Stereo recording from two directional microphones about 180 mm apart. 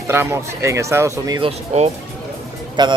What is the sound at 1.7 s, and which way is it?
Speech, 35° right (ahead or behind).